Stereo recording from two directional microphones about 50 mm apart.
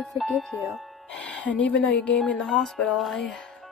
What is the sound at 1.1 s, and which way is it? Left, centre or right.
Speech, left.